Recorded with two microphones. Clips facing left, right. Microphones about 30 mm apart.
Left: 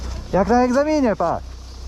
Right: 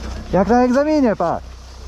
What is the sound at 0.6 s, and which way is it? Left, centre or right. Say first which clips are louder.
Speech: right 2 dB; centre.